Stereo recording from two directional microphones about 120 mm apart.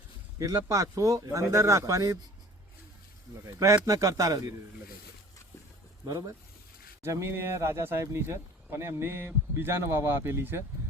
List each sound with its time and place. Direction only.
0.3 s speech: 30° right (ahead or behind)
3.8 s speech: 30° right (ahead or behind)
6.1 s speech: 30° right (ahead or behind)